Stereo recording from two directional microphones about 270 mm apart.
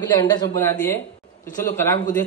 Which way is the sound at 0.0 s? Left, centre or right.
Centre.